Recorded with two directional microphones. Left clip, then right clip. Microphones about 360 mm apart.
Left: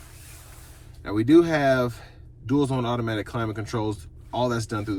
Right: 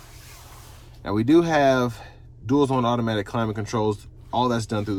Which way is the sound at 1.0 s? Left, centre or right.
Centre.